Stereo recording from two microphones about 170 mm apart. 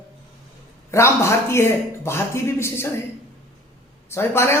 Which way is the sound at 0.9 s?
15° left (ahead or behind).